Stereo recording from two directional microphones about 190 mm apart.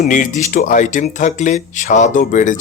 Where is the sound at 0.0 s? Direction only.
40° left (ahead or behind).